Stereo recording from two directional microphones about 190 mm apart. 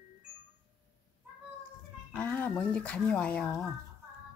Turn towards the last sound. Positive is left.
turn(degrees=5)  # may be behind; listen again after turning